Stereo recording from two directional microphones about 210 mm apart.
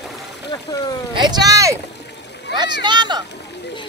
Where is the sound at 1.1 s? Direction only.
20° right (ahead or behind).